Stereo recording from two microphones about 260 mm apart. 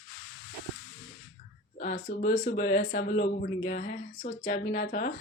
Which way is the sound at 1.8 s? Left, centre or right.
Left.